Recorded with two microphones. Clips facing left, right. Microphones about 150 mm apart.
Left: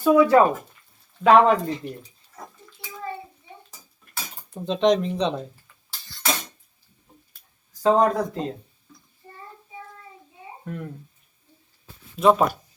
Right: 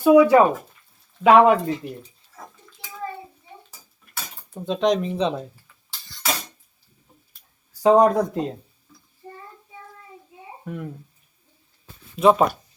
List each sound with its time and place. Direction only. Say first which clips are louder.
0.0 s speech: right 2 dB; 10° right (ahead or behind)
3.7 s dishes: left 1 dB; 5° right (ahead or behind)
7.8 s speech: right 4 dB; 15° right (ahead or behind)
10.7 s speech: right 1 dB; 5° right (ahead or behind)
12.2 s speech: right 1 dB; centre (ahead or behind)